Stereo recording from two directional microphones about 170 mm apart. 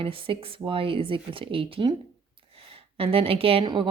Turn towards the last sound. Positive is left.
turn(degrees=-30)  # may be behind; listen again after turning